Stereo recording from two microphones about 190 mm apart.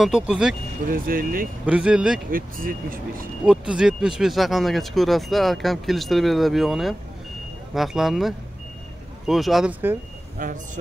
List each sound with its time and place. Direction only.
0.0 s speech: 5° right (ahead or behind)
0.8 s speech: 50° right (ahead or behind)
1.7 s speech: 5° right (ahead or behind)
2.3 s speech: 50° right (ahead or behind)
3.4 s speech: 5° right (ahead or behind)
10.4 s speech: 45° right (ahead or behind)